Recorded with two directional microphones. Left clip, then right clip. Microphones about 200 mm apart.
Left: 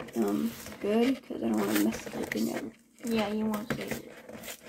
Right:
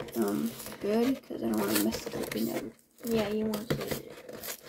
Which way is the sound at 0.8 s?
20° right (ahead or behind).